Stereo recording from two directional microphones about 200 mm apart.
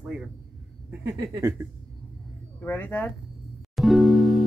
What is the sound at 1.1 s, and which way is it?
Speech, 15° right (ahead or behind).